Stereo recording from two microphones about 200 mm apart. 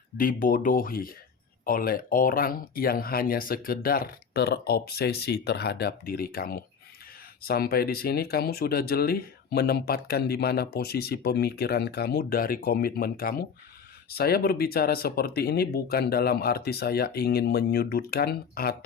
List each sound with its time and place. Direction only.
0.2 s speech: 45° left (ahead or behind)